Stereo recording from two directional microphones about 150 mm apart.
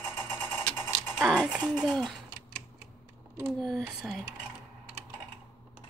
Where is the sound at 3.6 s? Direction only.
Centre (ahead or behind).